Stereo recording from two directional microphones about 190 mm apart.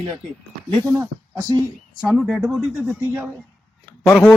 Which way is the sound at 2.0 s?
Centre (ahead or behind).